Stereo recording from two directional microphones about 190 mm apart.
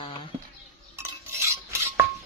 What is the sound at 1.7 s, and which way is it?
Cutlery, 15° right (ahead or behind).